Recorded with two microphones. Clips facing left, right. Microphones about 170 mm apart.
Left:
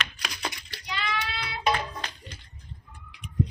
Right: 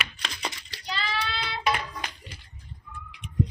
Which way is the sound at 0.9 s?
30° right (ahead or behind).